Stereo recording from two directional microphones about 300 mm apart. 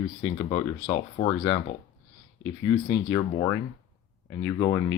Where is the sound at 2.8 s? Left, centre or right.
Centre.